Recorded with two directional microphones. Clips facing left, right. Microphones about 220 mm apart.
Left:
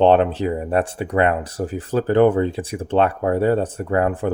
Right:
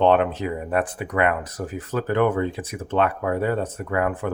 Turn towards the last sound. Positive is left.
turn(degrees=30)  # may be behind; listen again after turning